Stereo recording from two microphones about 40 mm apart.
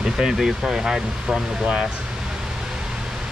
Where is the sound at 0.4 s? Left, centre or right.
Centre.